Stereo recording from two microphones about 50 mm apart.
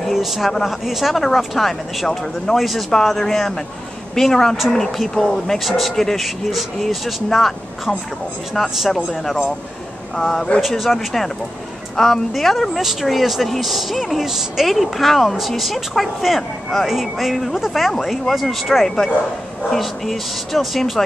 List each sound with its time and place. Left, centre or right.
0.0 s vehicle: centre
0.5 s speech: centre
5.7 s speech: centre
10.1 s speech: centre